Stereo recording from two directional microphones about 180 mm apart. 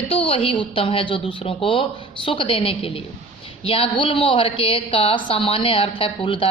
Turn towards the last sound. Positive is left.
turn(degrees=30)  # may be behind; listen again after turning